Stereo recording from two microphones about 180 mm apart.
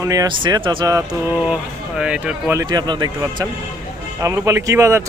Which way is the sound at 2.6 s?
25° right (ahead or behind).